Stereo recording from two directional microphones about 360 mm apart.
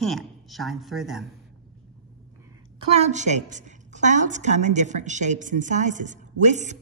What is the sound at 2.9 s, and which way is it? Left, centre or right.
A woman's voice, centre.